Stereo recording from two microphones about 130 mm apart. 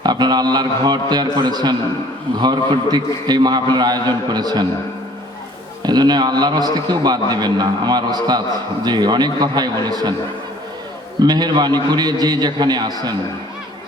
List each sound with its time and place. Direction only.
0.0 s a man's voice: 35° right (ahead or behind)
5.8 s a man's voice: 30° right (ahead or behind)
11.2 s a man's voice: 35° right (ahead or behind)